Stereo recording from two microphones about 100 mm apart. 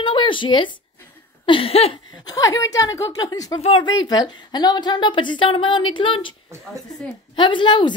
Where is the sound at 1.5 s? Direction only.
75° left (ahead or behind).